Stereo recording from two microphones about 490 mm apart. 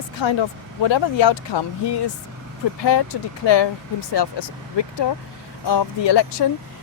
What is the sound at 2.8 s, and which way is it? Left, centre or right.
Speech, left.